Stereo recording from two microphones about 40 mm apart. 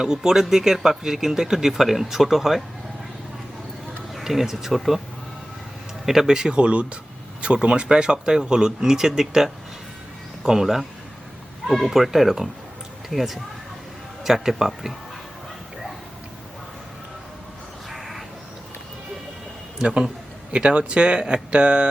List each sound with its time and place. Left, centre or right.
0.0 s speech: centre
4.1 s speech: centre
6.1 s speech: centre
6.6 s speech: right; by 14.9 s centre
17.8 s a sound: centre
19.8 s speech: centre